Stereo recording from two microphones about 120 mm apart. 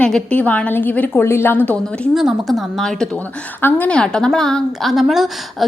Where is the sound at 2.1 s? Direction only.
5° right (ahead or behind).